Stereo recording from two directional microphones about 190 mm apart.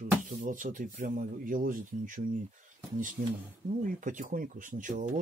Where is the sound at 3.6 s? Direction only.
45° right (ahead or behind).